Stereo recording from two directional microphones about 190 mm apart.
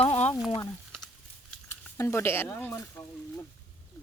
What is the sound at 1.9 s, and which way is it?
Speech, 15° left (ahead or behind).